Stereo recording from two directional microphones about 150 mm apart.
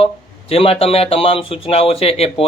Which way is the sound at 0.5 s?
40° left (ahead or behind).